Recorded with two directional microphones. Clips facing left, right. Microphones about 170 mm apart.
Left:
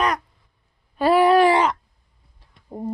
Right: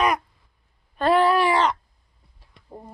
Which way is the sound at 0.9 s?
10° left (ahead or behind).